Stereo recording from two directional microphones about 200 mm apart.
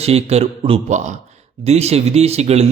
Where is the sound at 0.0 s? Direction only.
30° right (ahead or behind).